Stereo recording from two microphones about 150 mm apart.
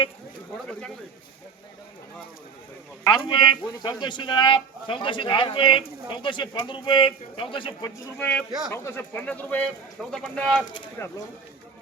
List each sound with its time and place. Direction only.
3.1 s speech: 30° left (ahead or behind)
8.2 s speech: 10° left (ahead or behind)
11.0 s speech: 15° left (ahead or behind)